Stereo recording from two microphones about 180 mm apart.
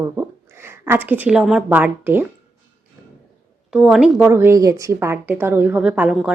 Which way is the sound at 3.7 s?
5° right (ahead or behind).